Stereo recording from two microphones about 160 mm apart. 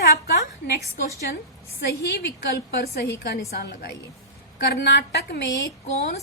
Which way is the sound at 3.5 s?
90° left.